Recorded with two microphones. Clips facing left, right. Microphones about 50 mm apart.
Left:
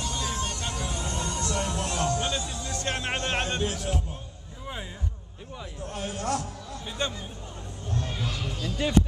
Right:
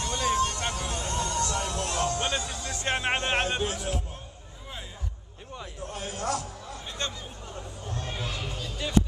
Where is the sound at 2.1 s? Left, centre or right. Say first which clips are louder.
Even; right; by 4.0 s centre.